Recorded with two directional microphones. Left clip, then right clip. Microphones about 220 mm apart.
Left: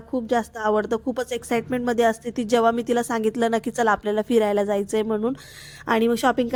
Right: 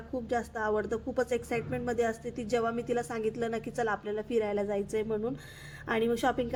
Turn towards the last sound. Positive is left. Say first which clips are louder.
# left 8 dB
turn(degrees=40)  # may be behind; listen again after turning